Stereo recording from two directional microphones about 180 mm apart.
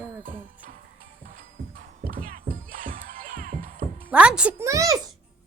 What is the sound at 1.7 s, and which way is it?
Music, 50° right (ahead or behind).